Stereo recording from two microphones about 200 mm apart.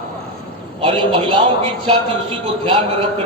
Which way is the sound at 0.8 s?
25° right (ahead or behind).